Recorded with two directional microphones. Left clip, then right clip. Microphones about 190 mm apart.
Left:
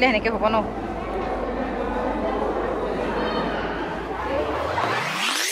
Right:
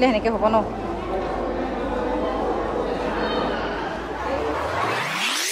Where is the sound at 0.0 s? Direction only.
20° right (ahead or behind).